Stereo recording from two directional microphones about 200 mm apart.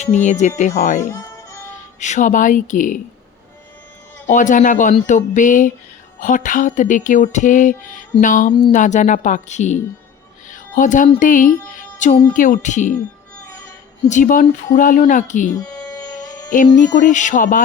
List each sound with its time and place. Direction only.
0.3 s speech: 35° left (ahead or behind)
4.3 s speech: 40° left (ahead or behind)
10.5 s music: 40° left (ahead or behind)
11.2 s speech: 40° left (ahead or behind)
14.1 s speech: 40° left (ahead or behind)
15.5 s music: 20° left (ahead or behind)
16.7 s speech: 40° left (ahead or behind)